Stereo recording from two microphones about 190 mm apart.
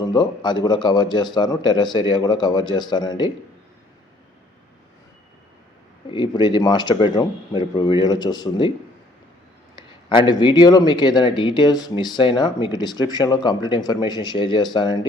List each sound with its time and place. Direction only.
0.0 s speech: 20° left (ahead or behind)
6.1 s speech: 25° left (ahead or behind)
10.2 s speech: 25° left (ahead or behind)